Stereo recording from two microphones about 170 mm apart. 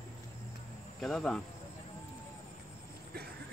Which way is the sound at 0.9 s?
Centre (ahead or behind).